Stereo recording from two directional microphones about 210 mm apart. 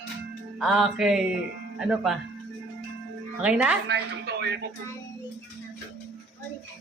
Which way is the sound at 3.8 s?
55° right (ahead or behind).